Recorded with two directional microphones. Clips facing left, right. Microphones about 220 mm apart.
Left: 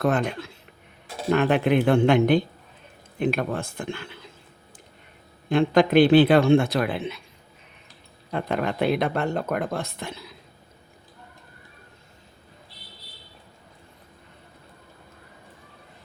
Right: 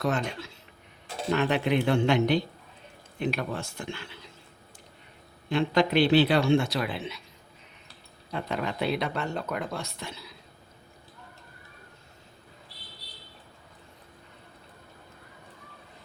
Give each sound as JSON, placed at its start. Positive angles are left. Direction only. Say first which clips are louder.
{"t": 0.0, "sound": "speech", "louder": "left 5 dB", "side_deg": 55}
{"t": 5.5, "sound": "speech", "louder": "left 5 dB", "side_deg": 50}
{"t": 8.3, "sound": "speech", "louder": "left 5 dB", "side_deg": 55}